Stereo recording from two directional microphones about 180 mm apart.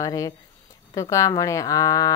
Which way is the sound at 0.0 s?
20° left (ahead or behind).